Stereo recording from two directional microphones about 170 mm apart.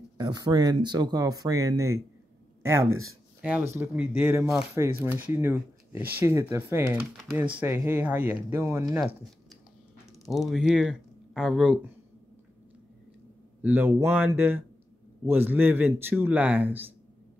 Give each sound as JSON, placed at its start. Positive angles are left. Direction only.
{"t": 0.2, "sound": "a man's voice", "side_deg": -25}
{"t": 10.3, "sound": "speech", "side_deg": 0}
{"t": 13.6, "sound": "a man's voice", "side_deg": -10}